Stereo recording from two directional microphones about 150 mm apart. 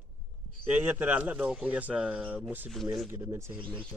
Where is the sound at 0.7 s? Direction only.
10° right (ahead or behind).